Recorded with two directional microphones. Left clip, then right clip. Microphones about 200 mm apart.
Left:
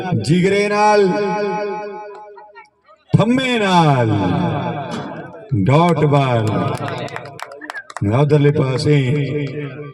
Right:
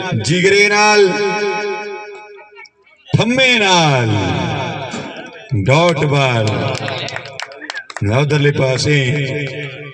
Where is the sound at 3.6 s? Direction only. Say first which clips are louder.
Right 2 dB; 45° right (ahead or behind).